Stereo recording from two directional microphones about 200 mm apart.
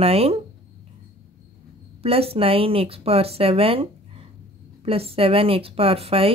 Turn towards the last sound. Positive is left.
turn(degrees=-30)  # may be behind; listen again after turning